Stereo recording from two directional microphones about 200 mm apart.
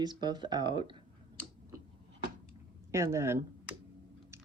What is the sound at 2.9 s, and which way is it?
Speech, 15° right (ahead or behind).